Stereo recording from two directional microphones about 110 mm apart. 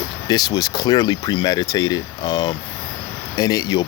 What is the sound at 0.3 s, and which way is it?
Speech, 35° left (ahead or behind).